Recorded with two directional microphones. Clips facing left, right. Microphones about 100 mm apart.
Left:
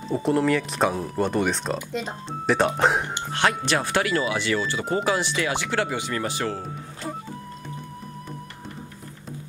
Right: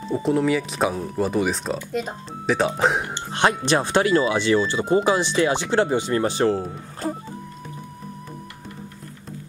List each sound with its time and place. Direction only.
0.1 s speech: centre (ahead or behind)
3.3 s speech: 20° right (ahead or behind)